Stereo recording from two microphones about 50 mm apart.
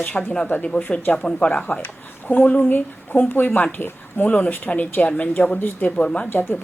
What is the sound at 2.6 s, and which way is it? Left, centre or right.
A woman's voice, left.